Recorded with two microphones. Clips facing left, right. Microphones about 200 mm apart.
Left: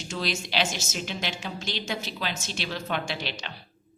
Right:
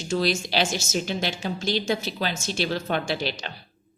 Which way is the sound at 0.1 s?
40° right (ahead or behind).